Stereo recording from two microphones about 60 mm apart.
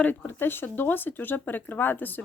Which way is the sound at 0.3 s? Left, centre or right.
Left.